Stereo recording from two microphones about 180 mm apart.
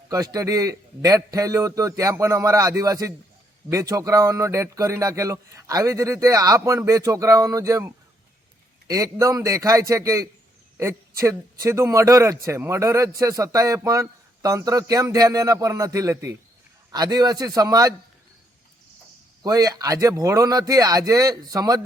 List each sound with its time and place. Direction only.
0.1 s a man's voice: 20° right (ahead or behind)
19.4 s a man's voice: 20° right (ahead or behind)